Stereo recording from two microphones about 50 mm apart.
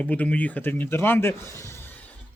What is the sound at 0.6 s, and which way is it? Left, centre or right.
Speech, left.